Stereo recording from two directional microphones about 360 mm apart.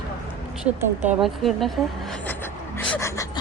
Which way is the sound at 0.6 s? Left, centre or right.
Centre.